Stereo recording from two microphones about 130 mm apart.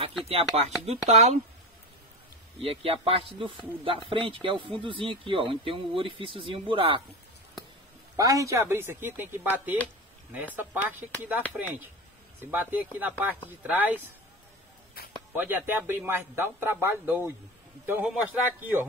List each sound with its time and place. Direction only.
0.0 s speech: 50° right (ahead or behind)
1.0 s speech: 60° right (ahead or behind)
2.6 s speech: 45° right (ahead or behind)
8.2 s a man's voice: 25° right (ahead or behind)
15.3 s a man's voice: 15° right (ahead or behind)